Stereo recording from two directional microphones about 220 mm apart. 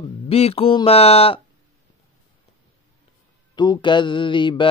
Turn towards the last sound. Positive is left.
turn(degrees=20)  # may be behind; listen again after turning